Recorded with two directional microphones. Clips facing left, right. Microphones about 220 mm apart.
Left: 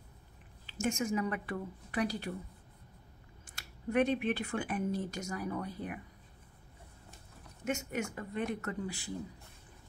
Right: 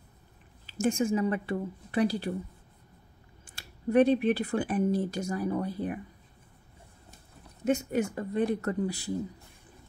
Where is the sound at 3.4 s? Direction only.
30° right (ahead or behind).